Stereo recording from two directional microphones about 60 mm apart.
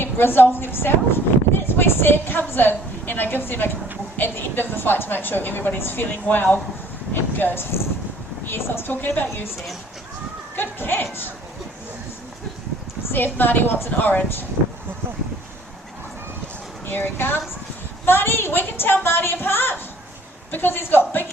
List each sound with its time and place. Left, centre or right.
0.0 s a woman's voice: left
10.6 s a child's voice: left
13.1 s a woman's voice: left
16.8 s a woman's voice: left